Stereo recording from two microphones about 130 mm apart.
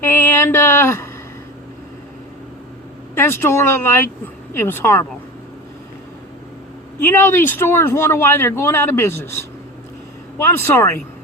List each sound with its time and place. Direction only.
0.0 s a sound: 20° left (ahead or behind)
3.2 s speech: 15° left (ahead or behind)
7.0 s speech: 20° left (ahead or behind)